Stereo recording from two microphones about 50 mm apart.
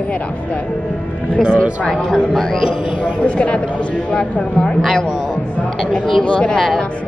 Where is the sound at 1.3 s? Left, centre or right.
Centre.